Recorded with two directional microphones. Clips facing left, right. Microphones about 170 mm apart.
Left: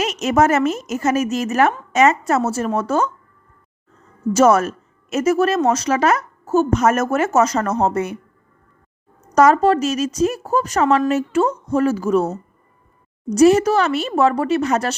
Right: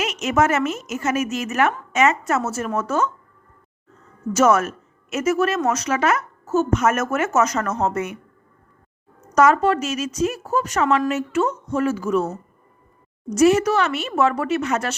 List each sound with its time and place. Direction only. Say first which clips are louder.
0.0 s a woman's voice: left 3 dB; 40° left (ahead or behind)
4.4 s a woman's voice: left 3 dB; 35° left (ahead or behind)
9.3 s a woman's voice: left 3 dB; 35° left (ahead or behind)
13.3 s a woman's voice: left 3 dB; 35° left (ahead or behind)